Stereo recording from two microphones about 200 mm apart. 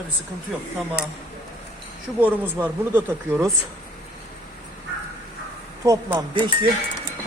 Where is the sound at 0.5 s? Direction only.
Centre (ahead or behind).